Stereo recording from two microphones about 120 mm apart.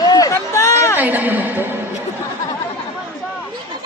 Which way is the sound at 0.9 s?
15° right (ahead or behind).